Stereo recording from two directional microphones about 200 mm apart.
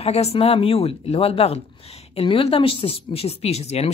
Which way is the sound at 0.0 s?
30° left (ahead or behind).